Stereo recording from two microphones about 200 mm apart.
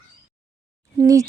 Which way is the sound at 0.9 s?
15° right (ahead or behind).